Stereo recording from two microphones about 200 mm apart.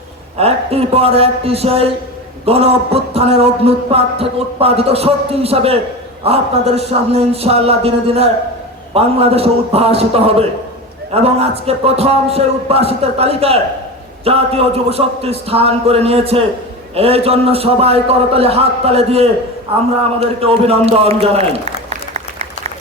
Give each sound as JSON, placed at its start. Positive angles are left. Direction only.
{"t": 0.3, "sound": "a man's voice", "side_deg": -30}